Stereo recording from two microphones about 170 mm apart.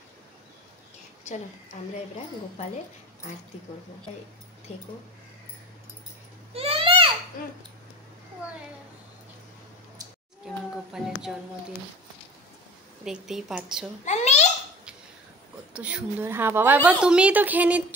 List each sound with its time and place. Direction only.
1.7 s speech: 45° left (ahead or behind)
6.5 s a sound: 35° right (ahead or behind)
10.4 s speech: centre (ahead or behind)
13.0 s speech: 5° right (ahead or behind)
14.0 s a sound: 40° left (ahead or behind)
15.7 s a woman's voice: 5° right (ahead or behind)